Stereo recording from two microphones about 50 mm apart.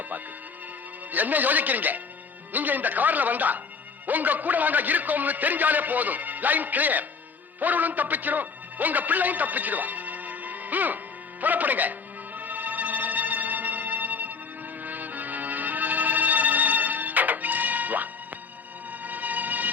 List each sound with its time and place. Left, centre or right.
1.1 s a man's voice: right
12.4 s music: right